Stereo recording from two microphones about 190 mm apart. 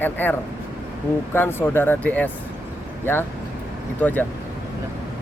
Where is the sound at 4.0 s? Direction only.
10° left (ahead or behind).